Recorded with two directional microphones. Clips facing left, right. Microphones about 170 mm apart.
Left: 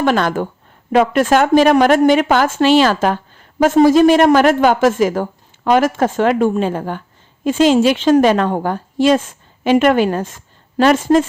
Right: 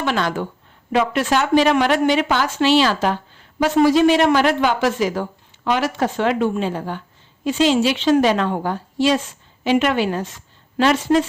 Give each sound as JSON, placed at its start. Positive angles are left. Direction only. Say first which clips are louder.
{"t": 0.0, "sound": "a woman's voice", "louder": "left 6 dB", "side_deg": 50}